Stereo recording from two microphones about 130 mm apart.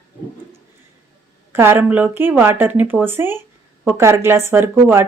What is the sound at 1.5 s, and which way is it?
A woman's voice, 15° right (ahead or behind).